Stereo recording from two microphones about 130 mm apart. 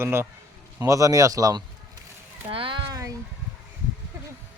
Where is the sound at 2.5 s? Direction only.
40° right (ahead or behind).